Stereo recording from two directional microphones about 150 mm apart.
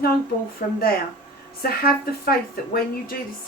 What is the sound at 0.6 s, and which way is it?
Speech, 65° left (ahead or behind).